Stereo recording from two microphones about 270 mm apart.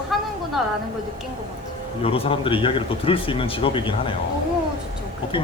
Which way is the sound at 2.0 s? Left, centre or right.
Left.